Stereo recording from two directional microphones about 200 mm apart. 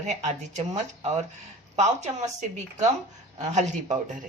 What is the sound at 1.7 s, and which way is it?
Speech, 35° right (ahead or behind).